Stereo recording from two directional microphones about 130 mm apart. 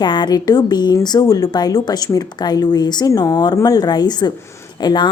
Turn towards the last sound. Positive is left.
turn(degrees=30)  # may be behind; listen again after turning